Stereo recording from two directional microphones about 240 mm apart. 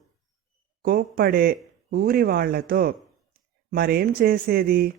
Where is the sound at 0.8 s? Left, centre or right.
Right.